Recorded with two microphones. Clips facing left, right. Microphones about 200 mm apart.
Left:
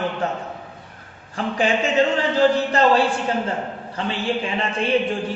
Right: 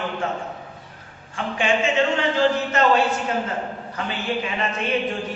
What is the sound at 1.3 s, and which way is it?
Speech, 40° left (ahead or behind).